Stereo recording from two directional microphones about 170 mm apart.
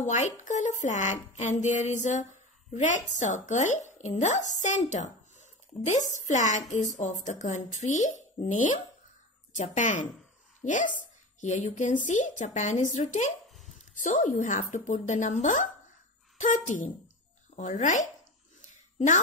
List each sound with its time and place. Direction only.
0.0 s a woman's voice: 45° left (ahead or behind)